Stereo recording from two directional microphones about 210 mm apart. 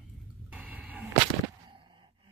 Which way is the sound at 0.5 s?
5° right (ahead or behind).